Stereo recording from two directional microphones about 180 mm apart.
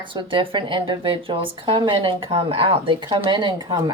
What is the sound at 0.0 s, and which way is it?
Speech, 25° right (ahead or behind).